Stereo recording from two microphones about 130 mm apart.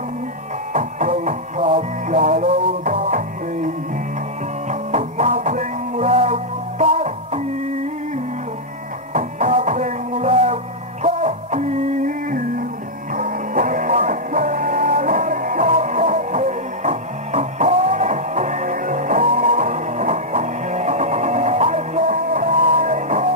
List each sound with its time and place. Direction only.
0.7 s music: 70° right (ahead or behind)
9.1 s music: 65° right (ahead or behind)